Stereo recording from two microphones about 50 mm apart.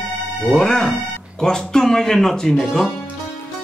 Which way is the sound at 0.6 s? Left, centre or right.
Centre.